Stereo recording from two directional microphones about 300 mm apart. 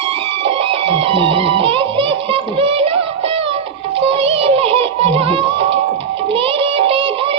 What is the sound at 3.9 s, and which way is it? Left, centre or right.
Music, centre.